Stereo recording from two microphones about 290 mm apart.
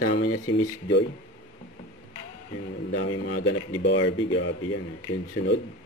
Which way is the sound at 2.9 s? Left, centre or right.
Left.